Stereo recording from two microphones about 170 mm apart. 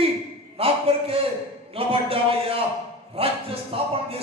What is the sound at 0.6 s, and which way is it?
A man's voice, 35° right (ahead or behind).